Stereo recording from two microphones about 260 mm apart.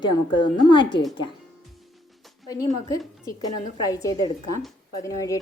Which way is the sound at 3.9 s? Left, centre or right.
Centre.